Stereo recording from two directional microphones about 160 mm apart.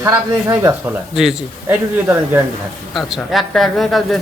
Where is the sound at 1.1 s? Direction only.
Centre (ahead or behind).